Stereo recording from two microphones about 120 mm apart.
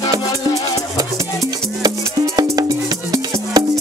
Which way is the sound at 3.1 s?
35° right (ahead or behind).